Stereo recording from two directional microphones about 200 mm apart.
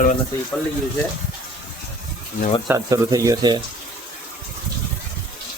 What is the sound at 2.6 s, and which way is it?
Speech, 15° right (ahead or behind).